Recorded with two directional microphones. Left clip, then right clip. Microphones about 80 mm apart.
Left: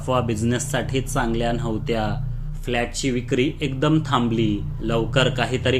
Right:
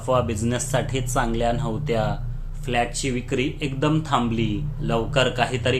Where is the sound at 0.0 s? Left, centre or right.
Centre.